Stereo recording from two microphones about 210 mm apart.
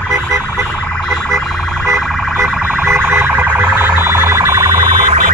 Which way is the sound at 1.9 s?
Centre (ahead or behind).